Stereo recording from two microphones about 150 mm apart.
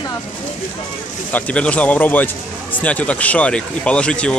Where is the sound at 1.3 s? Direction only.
10° left (ahead or behind).